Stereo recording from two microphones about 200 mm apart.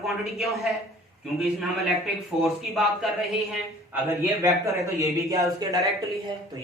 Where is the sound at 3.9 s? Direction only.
15° right (ahead or behind).